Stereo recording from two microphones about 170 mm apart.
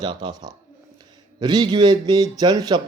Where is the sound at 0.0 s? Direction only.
25° right (ahead or behind).